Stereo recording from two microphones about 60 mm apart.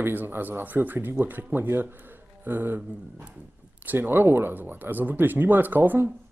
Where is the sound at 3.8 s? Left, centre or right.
Right.